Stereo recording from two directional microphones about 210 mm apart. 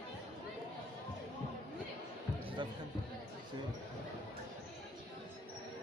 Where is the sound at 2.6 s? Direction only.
20° right (ahead or behind).